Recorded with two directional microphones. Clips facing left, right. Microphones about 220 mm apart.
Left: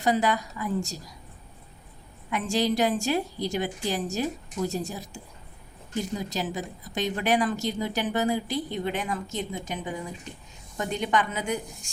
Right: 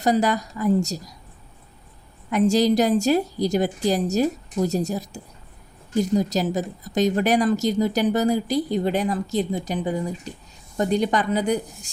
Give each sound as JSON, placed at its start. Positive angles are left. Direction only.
{"t": 0.0, "sound": "speech", "side_deg": -40}
{"t": 2.3, "sound": "speech", "side_deg": -40}